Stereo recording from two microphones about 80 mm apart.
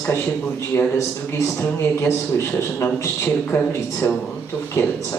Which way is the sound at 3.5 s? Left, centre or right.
Left.